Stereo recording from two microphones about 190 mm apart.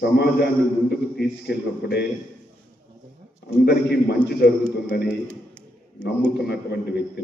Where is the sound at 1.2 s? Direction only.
60° left (ahead or behind).